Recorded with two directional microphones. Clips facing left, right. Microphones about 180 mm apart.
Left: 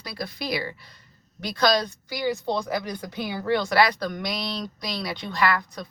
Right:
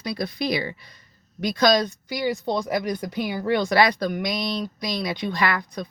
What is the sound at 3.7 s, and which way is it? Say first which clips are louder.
Speech: right 2 dB; 15° right (ahead or behind).